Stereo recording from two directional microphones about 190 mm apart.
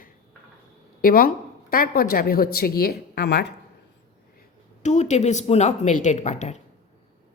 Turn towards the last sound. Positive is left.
turn(degrees=35)  # may be behind; listen again after turning